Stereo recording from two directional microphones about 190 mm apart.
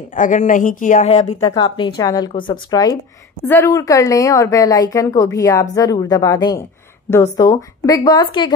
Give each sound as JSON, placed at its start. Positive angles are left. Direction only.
{"t": 0.1, "sound": "speech", "side_deg": 40}
{"t": 1.4, "sound": "a woman's voice", "side_deg": 20}